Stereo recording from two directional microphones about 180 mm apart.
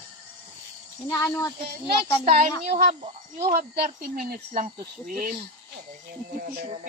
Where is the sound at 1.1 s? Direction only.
15° left (ahead or behind).